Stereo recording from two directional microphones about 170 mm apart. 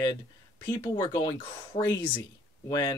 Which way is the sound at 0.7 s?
25° left (ahead or behind).